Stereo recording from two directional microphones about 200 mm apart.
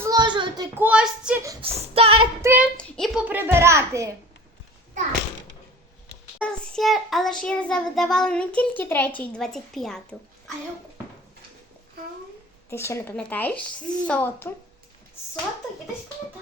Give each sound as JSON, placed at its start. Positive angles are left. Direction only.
{"t": 0.0, "sound": "child singing", "side_deg": -20}
{"t": 0.8, "sound": "a woman's voice", "side_deg": -5}
{"t": 1.6, "sound": "a sound", "side_deg": -30}
{"t": 2.4, "sound": "speech", "side_deg": -10}
{"t": 2.7, "sound": "a child's voice", "side_deg": 5}
{"t": 6.4, "sound": "child singing", "side_deg": 0}
{"t": 12.7, "sound": "a woman's voice", "side_deg": 15}